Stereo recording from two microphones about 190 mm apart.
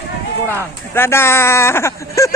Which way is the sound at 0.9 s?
10° left (ahead or behind).